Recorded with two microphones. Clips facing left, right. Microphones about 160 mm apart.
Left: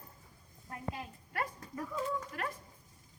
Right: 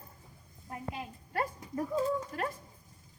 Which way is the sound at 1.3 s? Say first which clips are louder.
Right 5 dB; 30° right (ahead or behind).